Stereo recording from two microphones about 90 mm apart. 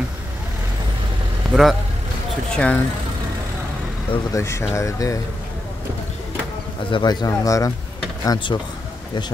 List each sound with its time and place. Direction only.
1.5 s speech: centre (ahead or behind)
2.5 s speech: 15° left (ahead or behind)
4.3 s speech: 30° left (ahead or behind)
6.9 s speech: 55° left (ahead or behind); by 7.7 s 40° left (ahead or behind)
8.5 s speech: 55° left (ahead or behind)